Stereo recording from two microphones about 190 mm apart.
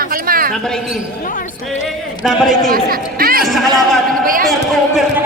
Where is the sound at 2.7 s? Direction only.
50° right (ahead or behind).